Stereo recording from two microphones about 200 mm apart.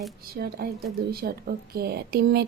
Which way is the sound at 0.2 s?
50° right (ahead or behind).